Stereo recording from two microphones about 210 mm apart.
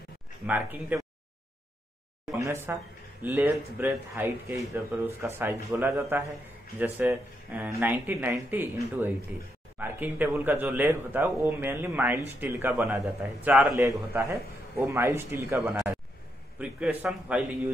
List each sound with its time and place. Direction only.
0.5 s a man's voice: 10° right (ahead or behind)
2.3 s a man's voice: 15° right (ahead or behind)